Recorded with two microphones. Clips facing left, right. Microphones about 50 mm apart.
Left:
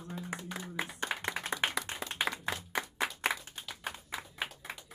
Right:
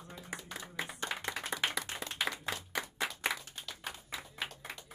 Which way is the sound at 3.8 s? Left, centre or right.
Left.